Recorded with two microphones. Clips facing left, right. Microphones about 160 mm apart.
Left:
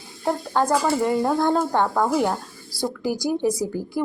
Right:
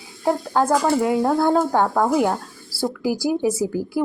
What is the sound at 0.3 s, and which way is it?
A woman's voice, 5° right (ahead or behind).